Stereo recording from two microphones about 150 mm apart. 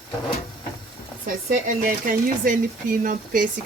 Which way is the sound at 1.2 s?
65° right (ahead or behind).